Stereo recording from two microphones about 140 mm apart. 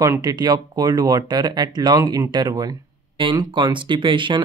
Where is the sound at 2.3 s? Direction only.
30° right (ahead or behind).